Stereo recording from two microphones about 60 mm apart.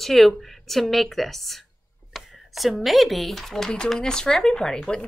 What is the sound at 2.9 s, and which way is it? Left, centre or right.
Speech, centre.